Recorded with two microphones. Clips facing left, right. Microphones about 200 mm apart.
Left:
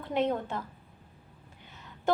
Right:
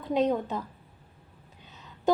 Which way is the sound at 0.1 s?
15° right (ahead or behind).